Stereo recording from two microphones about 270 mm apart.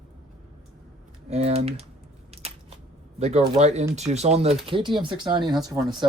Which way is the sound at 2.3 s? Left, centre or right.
Right.